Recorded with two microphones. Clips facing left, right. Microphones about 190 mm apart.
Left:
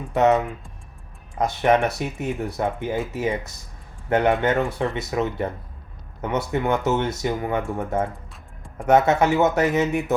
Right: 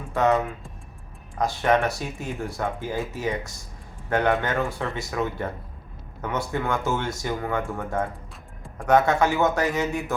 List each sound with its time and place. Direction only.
0.1 s speech: 20° left (ahead or behind)
1.6 s speech: 20° left (ahead or behind)